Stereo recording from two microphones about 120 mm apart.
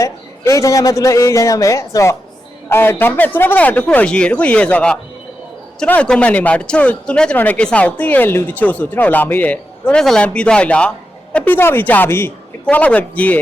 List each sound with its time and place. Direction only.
0.0 s a man's voice: 25° left (ahead or behind)